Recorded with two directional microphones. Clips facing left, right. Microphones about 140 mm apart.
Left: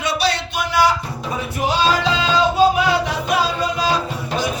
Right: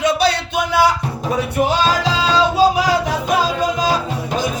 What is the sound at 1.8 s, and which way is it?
Music, 35° right (ahead or behind).